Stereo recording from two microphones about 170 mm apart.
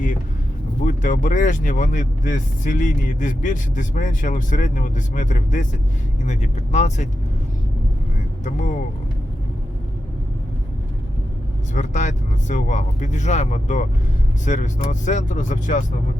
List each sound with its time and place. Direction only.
0.9 s speech: 50° left (ahead or behind)
8.4 s speech: 50° left (ahead or behind)
11.7 s speech: 45° left (ahead or behind)